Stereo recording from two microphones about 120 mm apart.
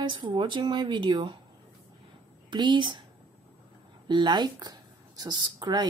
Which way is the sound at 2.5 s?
40° right (ahead or behind).